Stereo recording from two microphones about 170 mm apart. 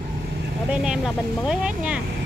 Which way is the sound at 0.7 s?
5° right (ahead or behind).